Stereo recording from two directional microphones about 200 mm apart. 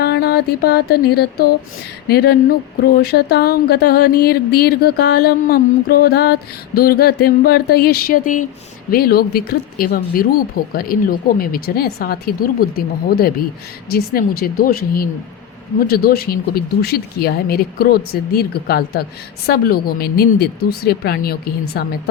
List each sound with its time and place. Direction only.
0.0 s music: 50° left (ahead or behind)
2.0 s speech: 50° left (ahead or behind)